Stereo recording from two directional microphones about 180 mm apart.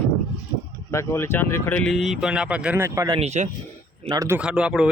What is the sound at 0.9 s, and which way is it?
Speech, 15° left (ahead or behind).